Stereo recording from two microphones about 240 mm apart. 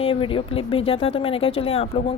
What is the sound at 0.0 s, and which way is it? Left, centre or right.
A woman's voice, left.